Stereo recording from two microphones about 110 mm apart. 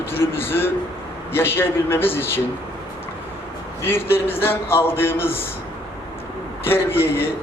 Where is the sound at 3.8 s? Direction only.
20° left (ahead or behind).